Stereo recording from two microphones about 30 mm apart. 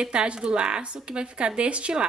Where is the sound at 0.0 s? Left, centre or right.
Right.